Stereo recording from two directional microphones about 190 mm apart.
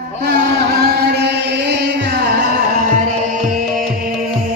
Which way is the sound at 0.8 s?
60° right (ahead or behind).